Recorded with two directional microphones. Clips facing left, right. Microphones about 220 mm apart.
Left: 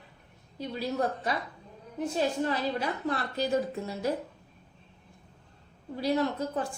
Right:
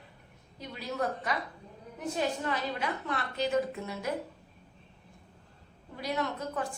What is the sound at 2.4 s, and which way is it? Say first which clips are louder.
A woman's voice: left 3 dB; 35° left (ahead or behind).